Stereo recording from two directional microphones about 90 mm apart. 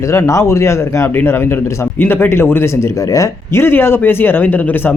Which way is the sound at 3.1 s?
40° left (ahead or behind).